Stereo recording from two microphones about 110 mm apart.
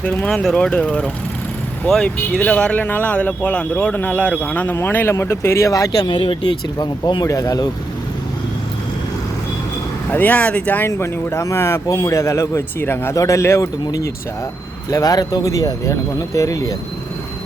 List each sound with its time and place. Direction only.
0.0 s speech: 10° left (ahead or behind); by 7.7 s 35° left (ahead or behind)
10.1 s a man's voice: 15° left (ahead or behind); by 16.7 s 30° left (ahead or behind)